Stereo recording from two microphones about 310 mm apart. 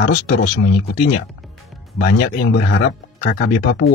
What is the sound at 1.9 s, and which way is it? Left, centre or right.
Speech, left.